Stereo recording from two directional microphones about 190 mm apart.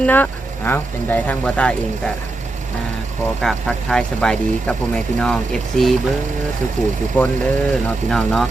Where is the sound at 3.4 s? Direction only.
5° left (ahead or behind).